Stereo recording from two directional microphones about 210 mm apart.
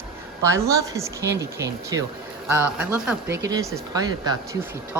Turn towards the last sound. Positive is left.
turn(degrees=-15)  # may be behind; listen again after turning